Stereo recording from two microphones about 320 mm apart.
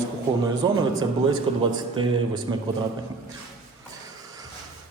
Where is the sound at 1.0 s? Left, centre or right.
Centre.